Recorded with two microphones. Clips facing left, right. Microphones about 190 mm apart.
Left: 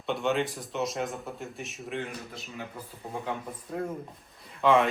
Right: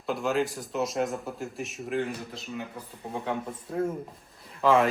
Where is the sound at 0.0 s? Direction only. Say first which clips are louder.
Right 1 dB; centre (ahead or behind).